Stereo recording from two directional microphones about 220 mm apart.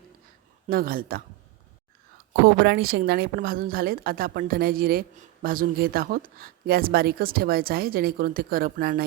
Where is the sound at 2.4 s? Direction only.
50° right (ahead or behind).